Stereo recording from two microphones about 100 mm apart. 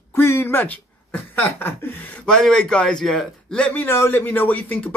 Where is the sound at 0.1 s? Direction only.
25° left (ahead or behind).